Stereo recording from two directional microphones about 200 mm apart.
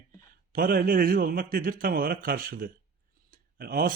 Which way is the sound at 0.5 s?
45° right (ahead or behind).